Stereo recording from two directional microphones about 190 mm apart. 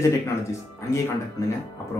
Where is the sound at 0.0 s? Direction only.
15° left (ahead or behind).